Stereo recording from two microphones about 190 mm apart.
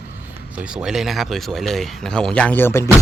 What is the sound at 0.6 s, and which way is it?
Speech, 5° right (ahead or behind).